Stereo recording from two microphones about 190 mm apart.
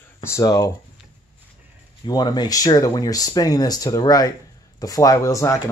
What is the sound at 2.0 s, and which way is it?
Speech, 20° left (ahead or behind).